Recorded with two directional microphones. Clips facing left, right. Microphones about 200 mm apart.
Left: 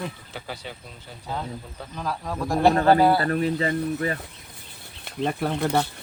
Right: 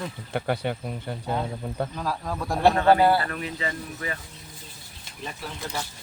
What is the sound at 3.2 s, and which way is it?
Speech, 40° left (ahead or behind).